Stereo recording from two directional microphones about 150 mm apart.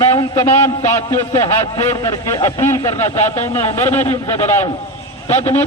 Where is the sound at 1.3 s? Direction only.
30° left (ahead or behind); by 4.1 s 15° left (ahead or behind).